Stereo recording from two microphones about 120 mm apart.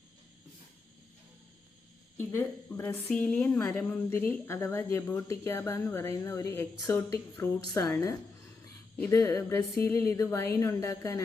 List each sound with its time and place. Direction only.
2.1 s a woman's voice: 20° left (ahead or behind)